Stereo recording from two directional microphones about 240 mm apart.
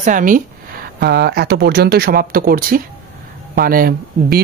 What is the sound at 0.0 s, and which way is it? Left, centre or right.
Speech, right.